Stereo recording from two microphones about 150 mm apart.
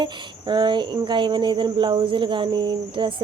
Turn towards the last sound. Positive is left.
turn(degrees=-35)  # may be behind; listen again after turning